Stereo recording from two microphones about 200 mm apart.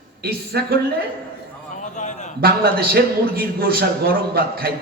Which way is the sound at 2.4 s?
50° right (ahead or behind).